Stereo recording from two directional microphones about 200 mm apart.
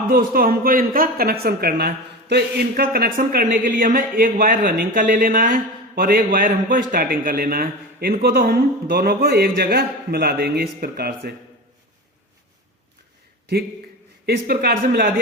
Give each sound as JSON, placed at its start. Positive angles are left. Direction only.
{"t": 0.1, "sound": "speech", "side_deg": -50}
{"t": 14.3, "sound": "speech", "side_deg": -50}